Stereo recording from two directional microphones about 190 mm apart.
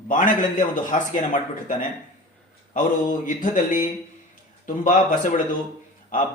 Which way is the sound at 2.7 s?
45° left (ahead or behind).